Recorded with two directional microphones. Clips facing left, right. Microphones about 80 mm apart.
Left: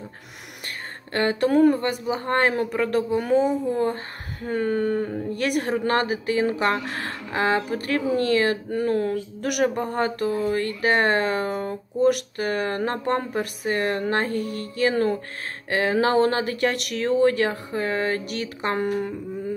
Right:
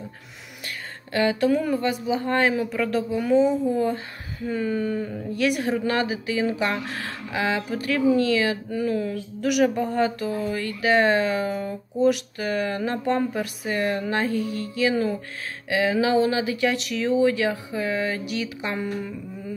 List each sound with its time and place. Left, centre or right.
1.1 s a woman's voice: left